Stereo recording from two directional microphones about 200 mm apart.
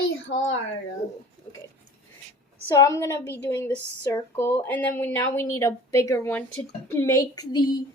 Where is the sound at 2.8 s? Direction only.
15° left (ahead or behind).